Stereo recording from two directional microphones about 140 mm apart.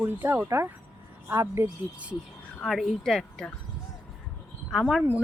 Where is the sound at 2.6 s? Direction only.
Centre (ahead or behind).